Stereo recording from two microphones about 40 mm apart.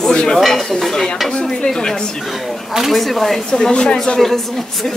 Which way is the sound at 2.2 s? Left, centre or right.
Centre.